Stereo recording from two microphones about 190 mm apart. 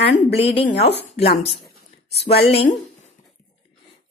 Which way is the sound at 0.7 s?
60° left (ahead or behind).